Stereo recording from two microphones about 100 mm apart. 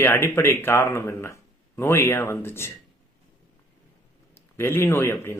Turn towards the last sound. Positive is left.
turn(degrees=25)  # may be behind; listen again after turning